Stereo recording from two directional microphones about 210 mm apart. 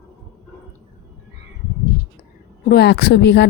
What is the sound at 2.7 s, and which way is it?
Speech, 50° left (ahead or behind).